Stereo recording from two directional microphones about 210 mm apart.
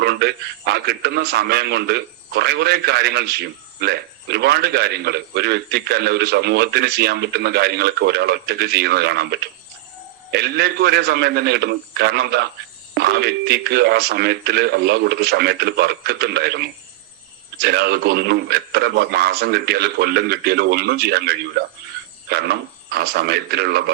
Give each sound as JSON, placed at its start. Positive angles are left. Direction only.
{"t": 0.0, "sound": "a man's voice", "side_deg": -50}